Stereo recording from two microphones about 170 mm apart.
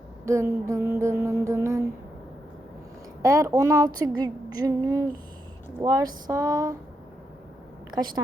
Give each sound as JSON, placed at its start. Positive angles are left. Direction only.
{"t": 0.3, "sound": "music", "side_deg": -15}
{"t": 3.2, "sound": "a woman's voice", "side_deg": -20}
{"t": 7.9, "sound": "a woman's voice", "side_deg": -25}